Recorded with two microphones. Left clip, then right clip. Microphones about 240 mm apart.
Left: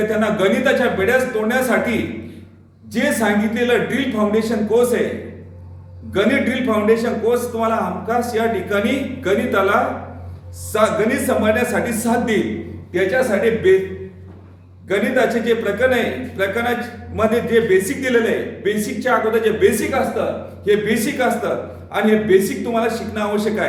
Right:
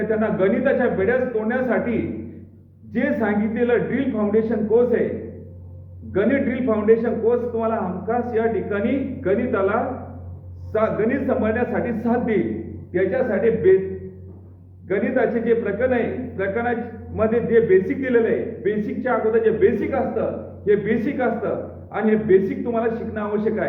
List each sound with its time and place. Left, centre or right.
0.1 s a man's voice: centre
6.1 s a man's voice: centre
14.8 s a man's voice: centre